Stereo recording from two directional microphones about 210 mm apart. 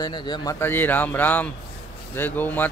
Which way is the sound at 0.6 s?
10° left (ahead or behind).